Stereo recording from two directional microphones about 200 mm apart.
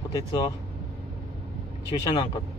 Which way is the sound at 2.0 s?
20° left (ahead or behind).